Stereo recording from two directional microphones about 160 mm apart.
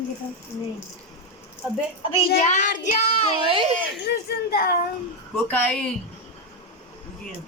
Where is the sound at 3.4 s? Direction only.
35° right (ahead or behind).